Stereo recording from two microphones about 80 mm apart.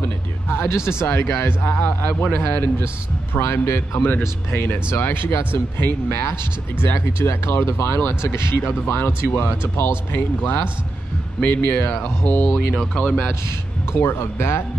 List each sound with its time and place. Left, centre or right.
0.0 s speech: left
13.9 s speech: left